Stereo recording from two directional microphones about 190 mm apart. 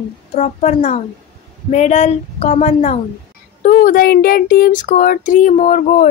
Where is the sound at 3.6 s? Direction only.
45° left (ahead or behind).